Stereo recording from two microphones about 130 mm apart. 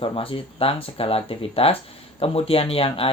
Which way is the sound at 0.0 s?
45° left (ahead or behind).